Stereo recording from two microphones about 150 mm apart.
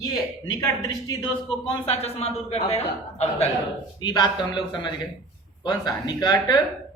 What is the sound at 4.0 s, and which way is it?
Speech, 30° left (ahead or behind).